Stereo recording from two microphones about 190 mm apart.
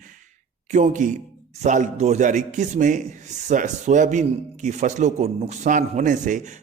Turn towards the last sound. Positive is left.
turn(degrees=-40)  # may be behind; listen again after turning